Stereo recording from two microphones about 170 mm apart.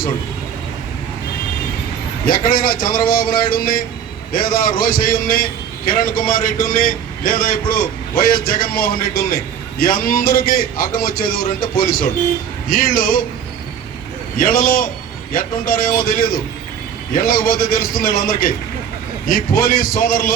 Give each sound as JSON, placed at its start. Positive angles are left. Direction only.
{"t": 2.2, "sound": "a man's voice", "side_deg": 60}
{"t": 14.3, "sound": "a man's voice", "side_deg": 55}